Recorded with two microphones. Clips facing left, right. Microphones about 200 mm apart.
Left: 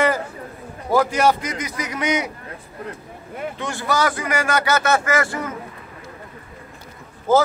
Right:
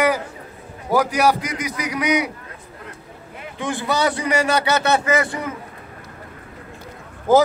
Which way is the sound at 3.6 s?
15° right (ahead or behind).